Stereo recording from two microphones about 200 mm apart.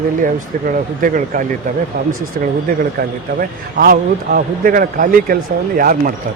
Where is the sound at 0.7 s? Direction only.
40° right (ahead or behind).